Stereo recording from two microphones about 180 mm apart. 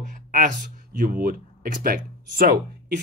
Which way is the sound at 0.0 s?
45° right (ahead or behind).